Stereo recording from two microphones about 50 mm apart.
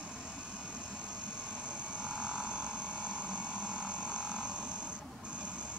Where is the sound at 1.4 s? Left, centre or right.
Centre.